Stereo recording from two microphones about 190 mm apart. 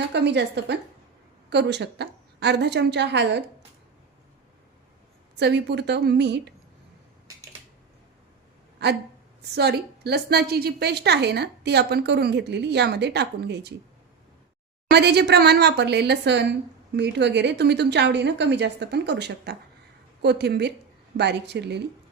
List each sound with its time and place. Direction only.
0.1 s a woman's voice: 65° right (ahead or behind)
5.4 s a woman's voice: 65° right (ahead or behind)
8.8 s a woman's voice: 60° right (ahead or behind)
14.8 s a woman's voice: 60° right (ahead or behind)